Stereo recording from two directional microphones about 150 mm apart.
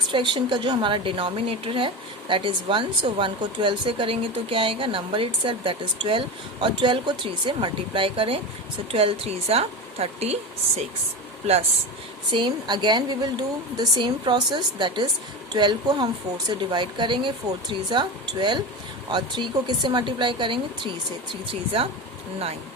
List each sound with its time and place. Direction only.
0.1 s a woman's voice: 30° right (ahead or behind)
12.3 s a woman's voice: 30° right (ahead or behind)